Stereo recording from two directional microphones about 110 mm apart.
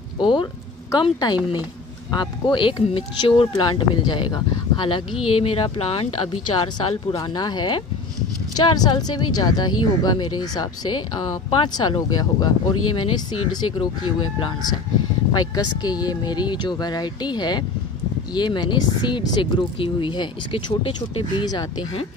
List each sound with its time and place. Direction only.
0.2 s speech: 45° left (ahead or behind)
3.9 s speech: 45° left (ahead or behind)
7.2 s speech: 40° left (ahead or behind)
21.5 s speech: 40° left (ahead or behind)